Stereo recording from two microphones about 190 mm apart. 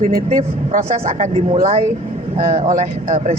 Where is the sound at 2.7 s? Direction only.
45° right (ahead or behind).